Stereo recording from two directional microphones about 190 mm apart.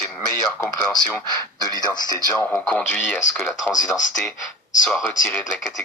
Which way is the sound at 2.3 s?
10° left (ahead or behind).